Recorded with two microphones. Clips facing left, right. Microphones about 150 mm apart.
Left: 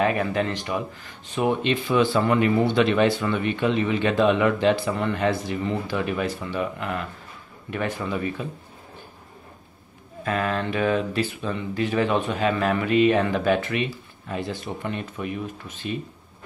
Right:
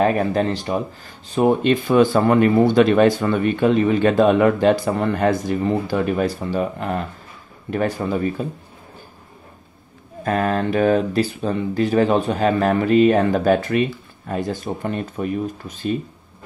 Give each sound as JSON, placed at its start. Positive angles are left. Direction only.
{"t": 0.0, "sound": "speech", "side_deg": -40}
{"t": 10.2, "sound": "speech", "side_deg": -45}